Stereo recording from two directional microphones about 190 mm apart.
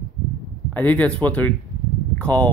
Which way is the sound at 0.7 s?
10° left (ahead or behind).